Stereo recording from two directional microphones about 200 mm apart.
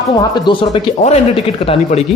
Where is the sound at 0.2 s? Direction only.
25° left (ahead or behind).